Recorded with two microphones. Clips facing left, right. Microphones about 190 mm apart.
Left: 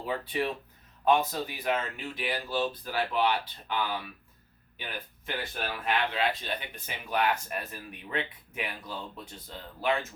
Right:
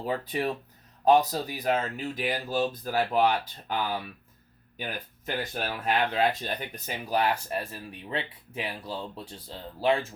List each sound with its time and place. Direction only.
0.0 s speech: 40° right (ahead or behind)
4.8 s speech: 40° right (ahead or behind)